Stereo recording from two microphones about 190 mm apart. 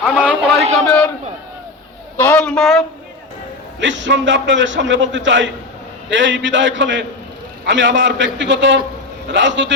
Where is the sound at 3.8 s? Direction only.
70° right (ahead or behind).